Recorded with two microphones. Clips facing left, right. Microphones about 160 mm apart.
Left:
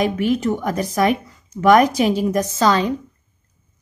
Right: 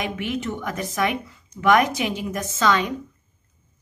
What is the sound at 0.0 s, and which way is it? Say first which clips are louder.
Speech: left 8 dB; 35° left (ahead or behind).